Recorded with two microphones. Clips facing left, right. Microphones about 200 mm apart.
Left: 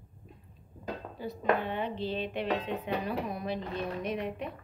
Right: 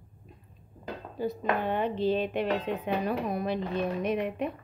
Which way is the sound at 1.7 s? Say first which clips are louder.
Right 6 dB; 45° right (ahead or behind).